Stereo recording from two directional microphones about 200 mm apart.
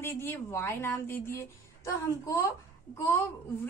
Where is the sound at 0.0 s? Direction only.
10° left (ahead or behind).